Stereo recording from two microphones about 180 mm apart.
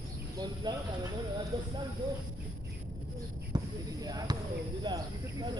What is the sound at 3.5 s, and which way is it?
Speech, 20° right (ahead or behind).